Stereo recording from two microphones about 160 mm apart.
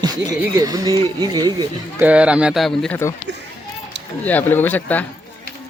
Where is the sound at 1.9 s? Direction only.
10° right (ahead or behind).